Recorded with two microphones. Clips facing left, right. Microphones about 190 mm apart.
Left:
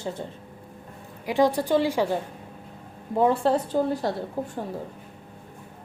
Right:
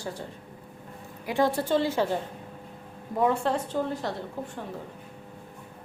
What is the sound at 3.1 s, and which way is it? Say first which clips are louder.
Speech: left 4 dB; 30° left (ahead or behind).